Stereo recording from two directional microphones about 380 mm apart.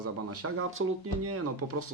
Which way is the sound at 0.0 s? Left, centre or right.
Right.